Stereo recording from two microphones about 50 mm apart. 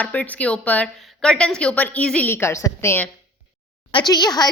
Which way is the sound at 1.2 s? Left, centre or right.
Centre.